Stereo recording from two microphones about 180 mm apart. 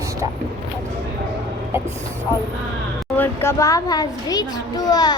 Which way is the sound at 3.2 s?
15° left (ahead or behind).